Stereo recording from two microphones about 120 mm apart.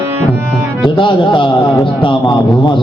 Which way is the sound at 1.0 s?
45° left (ahead or behind).